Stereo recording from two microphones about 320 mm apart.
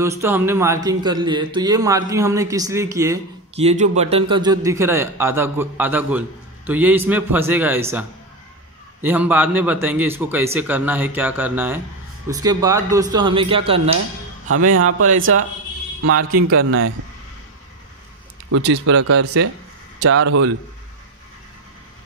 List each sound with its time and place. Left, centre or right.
0.0 s a man's voice: centre
3.6 s a man's voice: right
14.7 s a man's voice: right
18.5 s speech: right